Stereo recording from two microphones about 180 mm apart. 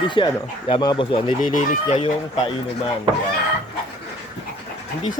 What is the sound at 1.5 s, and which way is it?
Speech, 45° left (ahead or behind).